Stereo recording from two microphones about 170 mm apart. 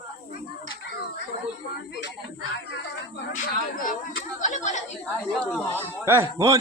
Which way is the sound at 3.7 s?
55° left (ahead or behind).